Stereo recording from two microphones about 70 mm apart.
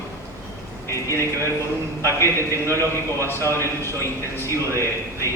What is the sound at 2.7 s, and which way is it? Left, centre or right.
Speech, right.